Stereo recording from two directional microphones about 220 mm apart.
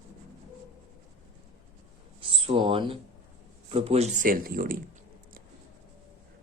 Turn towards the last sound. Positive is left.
turn(degrees=-40)  # may be behind; listen again after turning